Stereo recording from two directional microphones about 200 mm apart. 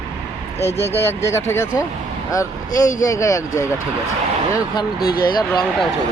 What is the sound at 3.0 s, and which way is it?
Speech, 15° left (ahead or behind).